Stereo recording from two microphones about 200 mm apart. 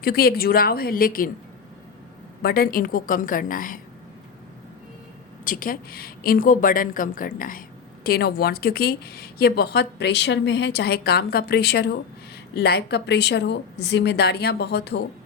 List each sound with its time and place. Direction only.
0.0 s a woman's voice: 50° left (ahead or behind)
2.4 s a woman's voice: 50° left (ahead or behind)
5.5 s a woman's voice: 45° left (ahead or behind)